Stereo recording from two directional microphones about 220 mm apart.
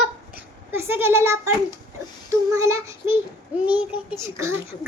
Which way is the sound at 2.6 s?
15° right (ahead or behind).